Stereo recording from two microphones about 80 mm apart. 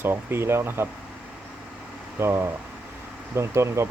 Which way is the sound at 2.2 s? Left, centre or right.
Right.